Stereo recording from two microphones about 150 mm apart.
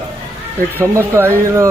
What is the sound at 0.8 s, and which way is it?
Speech, 15° right (ahead or behind).